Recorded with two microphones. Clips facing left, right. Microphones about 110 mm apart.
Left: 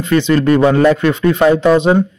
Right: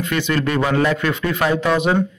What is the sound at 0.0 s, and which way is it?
A man's voice, 30° left (ahead or behind).